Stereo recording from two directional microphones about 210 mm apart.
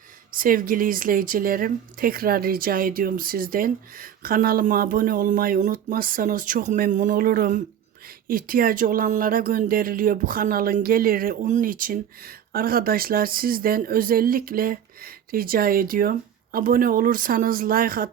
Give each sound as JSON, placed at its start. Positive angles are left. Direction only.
{"t": 0.3, "sound": "speech", "side_deg": -40}